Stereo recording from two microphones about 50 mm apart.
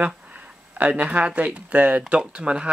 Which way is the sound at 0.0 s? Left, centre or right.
Right.